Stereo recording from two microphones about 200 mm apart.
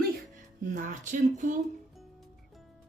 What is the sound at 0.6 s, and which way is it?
Speech, 40° right (ahead or behind).